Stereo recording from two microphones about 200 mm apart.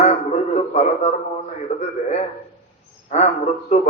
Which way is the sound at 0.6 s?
35° left (ahead or behind).